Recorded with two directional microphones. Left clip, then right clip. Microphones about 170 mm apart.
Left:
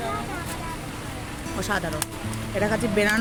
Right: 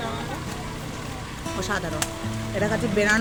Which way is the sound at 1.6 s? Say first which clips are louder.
Left 1 dB; 5° left (ahead or behind).